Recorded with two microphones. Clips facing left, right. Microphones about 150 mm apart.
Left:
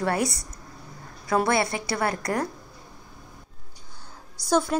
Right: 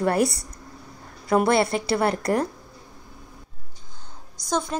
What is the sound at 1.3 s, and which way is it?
Speech, 25° right (ahead or behind).